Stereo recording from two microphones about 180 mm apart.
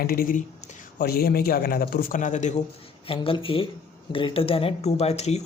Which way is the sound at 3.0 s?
30° left (ahead or behind).